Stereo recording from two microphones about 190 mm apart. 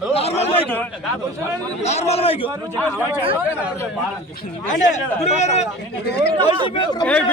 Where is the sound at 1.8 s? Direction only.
35° left (ahead or behind).